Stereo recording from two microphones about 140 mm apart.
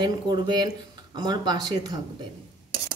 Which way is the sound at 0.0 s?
30° right (ahead or behind).